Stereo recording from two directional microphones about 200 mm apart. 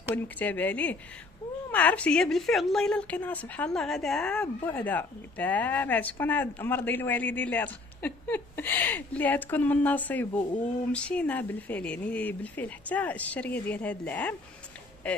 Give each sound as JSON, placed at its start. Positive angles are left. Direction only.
{"t": 0.1, "sound": "a woman's voice", "side_deg": 10}